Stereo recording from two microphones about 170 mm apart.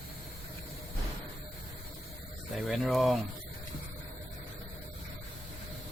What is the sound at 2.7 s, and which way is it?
Speech, centre (ahead or behind).